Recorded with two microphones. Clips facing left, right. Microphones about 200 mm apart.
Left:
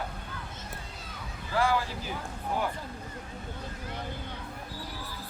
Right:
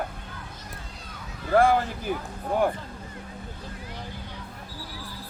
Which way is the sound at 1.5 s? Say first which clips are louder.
Right 7 dB; 55° right (ahead or behind).